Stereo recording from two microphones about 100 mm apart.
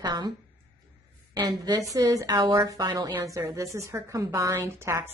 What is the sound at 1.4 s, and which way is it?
A woman's voice, 40° right (ahead or behind).